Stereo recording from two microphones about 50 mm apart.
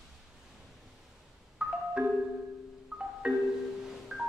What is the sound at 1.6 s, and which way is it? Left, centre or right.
Marimba, centre.